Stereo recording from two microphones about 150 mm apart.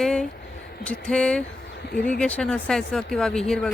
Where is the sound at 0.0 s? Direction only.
5° left (ahead or behind).